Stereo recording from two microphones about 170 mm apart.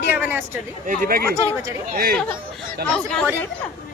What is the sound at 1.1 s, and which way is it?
Speech, 65° right (ahead or behind).